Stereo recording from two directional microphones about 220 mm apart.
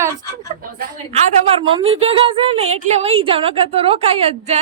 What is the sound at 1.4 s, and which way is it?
A woman's voice, 25° right (ahead or behind).